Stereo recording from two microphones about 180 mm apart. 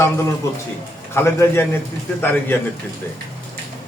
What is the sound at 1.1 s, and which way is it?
Speech, 15° left (ahead or behind).